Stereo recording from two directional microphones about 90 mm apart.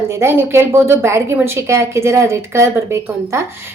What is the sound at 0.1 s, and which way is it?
A woman's voice, 30° right (ahead or behind).